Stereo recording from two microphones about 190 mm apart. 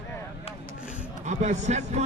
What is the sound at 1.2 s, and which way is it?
Speech, 40° right (ahead or behind).